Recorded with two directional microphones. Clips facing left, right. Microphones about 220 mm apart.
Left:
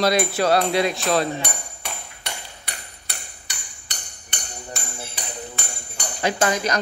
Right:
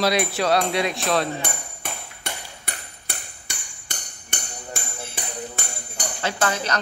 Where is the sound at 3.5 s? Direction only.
50° right (ahead or behind).